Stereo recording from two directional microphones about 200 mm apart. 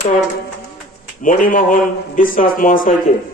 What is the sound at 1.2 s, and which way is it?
Speech, 40° left (ahead or behind).